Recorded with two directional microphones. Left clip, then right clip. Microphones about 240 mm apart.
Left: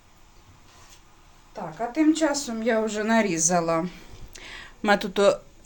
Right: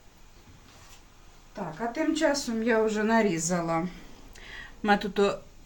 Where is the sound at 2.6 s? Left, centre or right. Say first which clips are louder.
Left 1 dB; left.